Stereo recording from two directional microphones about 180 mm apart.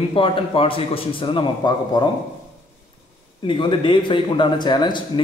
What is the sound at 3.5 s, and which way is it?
Speech, 25° left (ahead or behind).